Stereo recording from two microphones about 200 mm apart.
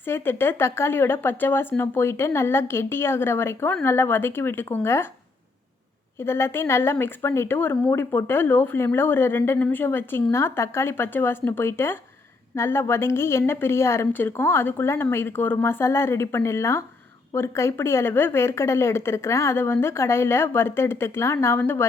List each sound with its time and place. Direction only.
0.0 s speech: 10° left (ahead or behind)
6.1 s speech: 10° left (ahead or behind)